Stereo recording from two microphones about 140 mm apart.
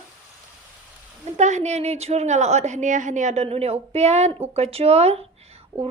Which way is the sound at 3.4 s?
45° right (ahead or behind).